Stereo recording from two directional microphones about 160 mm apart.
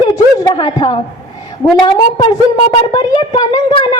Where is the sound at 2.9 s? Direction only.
25° left (ahead or behind).